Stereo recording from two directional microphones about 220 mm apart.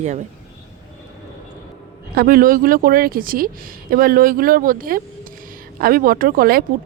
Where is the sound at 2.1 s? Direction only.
40° right (ahead or behind).